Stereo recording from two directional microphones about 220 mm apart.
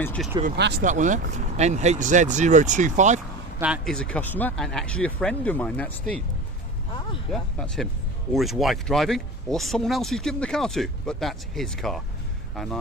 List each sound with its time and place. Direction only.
0.0 s speech: 5° left (ahead or behind)
0.4 s speech: 40° right (ahead or behind)
3.6 s speech: centre (ahead or behind)
7.3 s speech: centre (ahead or behind)